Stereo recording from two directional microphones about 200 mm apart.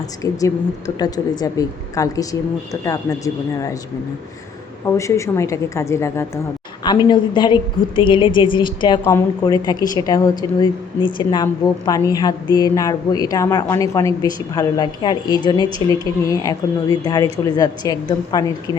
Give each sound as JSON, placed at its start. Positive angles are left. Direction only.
{"t": 0.2, "sound": "a woman's voice", "side_deg": 15}
{"t": 4.9, "sound": "a woman's voice", "side_deg": 15}